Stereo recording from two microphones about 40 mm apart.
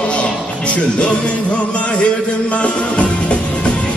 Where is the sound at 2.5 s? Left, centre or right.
Left.